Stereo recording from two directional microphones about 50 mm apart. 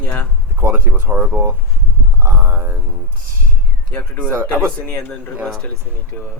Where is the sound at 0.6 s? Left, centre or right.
Right.